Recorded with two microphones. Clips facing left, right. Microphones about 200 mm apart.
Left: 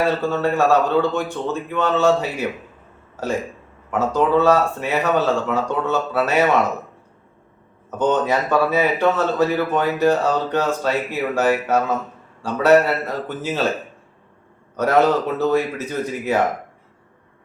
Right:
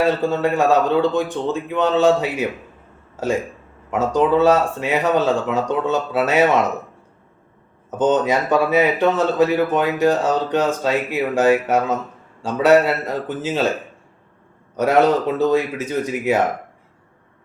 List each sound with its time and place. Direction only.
0.2 s speech: 15° right (ahead or behind)
3.9 s speech: 15° right (ahead or behind)
7.9 s speech: 20° right (ahead or behind)
14.8 s speech: 15° right (ahead or behind)